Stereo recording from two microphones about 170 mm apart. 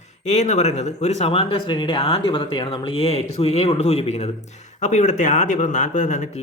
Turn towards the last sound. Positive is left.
turn(degrees=45)  # may be behind; listen again after turning